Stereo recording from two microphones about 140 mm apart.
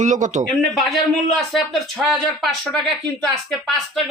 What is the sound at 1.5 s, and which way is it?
Speech, centre (ahead or behind).